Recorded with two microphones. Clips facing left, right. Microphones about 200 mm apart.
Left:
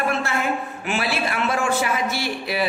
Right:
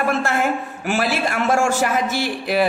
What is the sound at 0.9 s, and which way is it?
A woman's voice, 45° right (ahead or behind).